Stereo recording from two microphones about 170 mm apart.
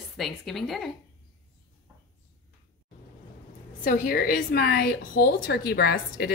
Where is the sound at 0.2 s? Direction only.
Centre (ahead or behind).